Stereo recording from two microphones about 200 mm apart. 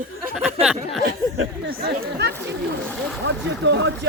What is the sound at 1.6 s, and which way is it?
Speech, 55° right (ahead or behind).